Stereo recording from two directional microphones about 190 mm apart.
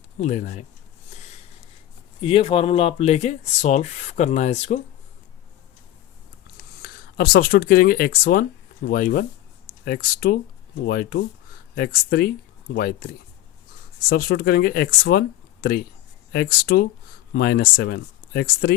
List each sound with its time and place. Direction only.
0.2 s rub: 40° left (ahead or behind)
1.1 s a sound: 35° left (ahead or behind)
2.2 s rub: 25° left (ahead or behind)
6.8 s speech: 55° left (ahead or behind)
14.1 s speech: 55° left (ahead or behind)
16.3 s speech: 55° left (ahead or behind)